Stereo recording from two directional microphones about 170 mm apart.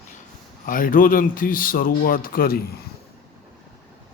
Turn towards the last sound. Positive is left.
turn(degrees=60)  # may be behind; listen again after turning